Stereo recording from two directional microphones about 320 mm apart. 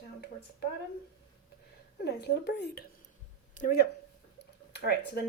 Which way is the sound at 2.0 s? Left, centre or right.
Left.